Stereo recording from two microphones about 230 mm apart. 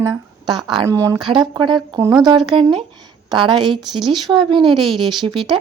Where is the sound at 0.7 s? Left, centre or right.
Centre.